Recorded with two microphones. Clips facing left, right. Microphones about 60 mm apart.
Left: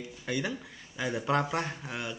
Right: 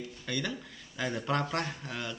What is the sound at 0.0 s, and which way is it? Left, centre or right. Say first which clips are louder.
Speech: left 2 dB; centre.